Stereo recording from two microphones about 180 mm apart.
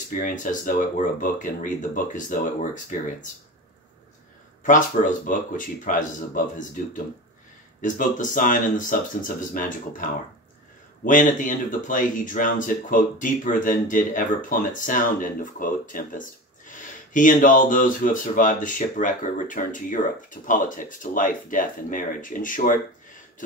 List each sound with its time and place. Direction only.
0.1 s speech: 45° left (ahead or behind)
4.6 s speech: 45° left (ahead or behind)
11.1 s speech: 45° left (ahead or behind)